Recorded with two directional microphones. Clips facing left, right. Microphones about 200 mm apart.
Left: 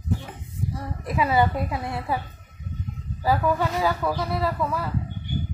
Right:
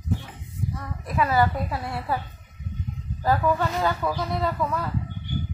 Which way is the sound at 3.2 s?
10° left (ahead or behind).